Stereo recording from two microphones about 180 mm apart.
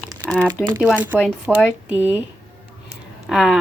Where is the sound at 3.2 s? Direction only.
Centre (ahead or behind).